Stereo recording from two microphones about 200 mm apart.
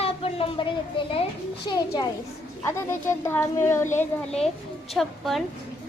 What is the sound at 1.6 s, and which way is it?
A child's voice, 20° left (ahead or behind).